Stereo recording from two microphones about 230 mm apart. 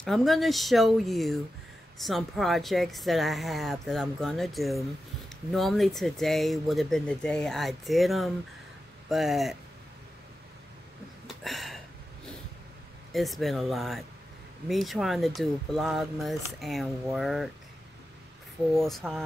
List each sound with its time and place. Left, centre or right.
0.0 s speech: centre
11.4 s a sound: centre
13.1 s speech: centre
18.7 s speech: centre